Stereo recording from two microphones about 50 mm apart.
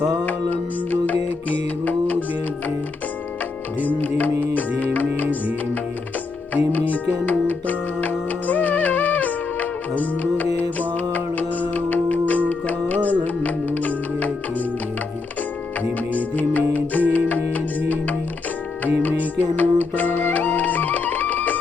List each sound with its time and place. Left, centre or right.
0.3 s music: left
3.8 s music: left
6.5 s music: left
15.8 s music: left
19.0 s music: left